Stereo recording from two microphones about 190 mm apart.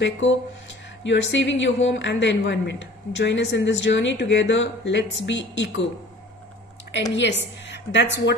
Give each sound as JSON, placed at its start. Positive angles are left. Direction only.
{"t": 1.0, "sound": "a woman's voice", "side_deg": 70}
{"t": 6.9, "sound": "a woman's voice", "side_deg": 70}